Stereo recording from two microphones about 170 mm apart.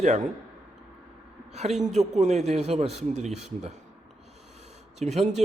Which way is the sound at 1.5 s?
40° right (ahead or behind).